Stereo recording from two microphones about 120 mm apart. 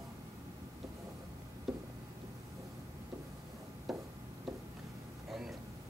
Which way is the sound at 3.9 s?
Centre (ahead or behind).